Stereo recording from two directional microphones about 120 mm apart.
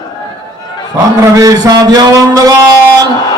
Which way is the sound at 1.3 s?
30° right (ahead or behind).